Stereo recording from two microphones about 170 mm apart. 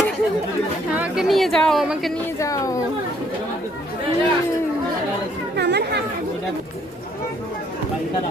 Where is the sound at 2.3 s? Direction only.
20° left (ahead or behind).